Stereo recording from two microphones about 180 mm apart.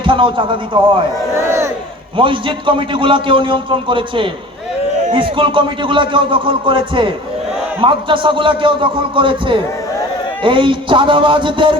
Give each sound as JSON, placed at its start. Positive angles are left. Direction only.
{"t": 0.0, "sound": "a man's voice", "side_deg": -25}
{"t": 1.5, "sound": "battle cry", "side_deg": -15}
{"t": 2.1, "sound": "a man's voice", "side_deg": -30}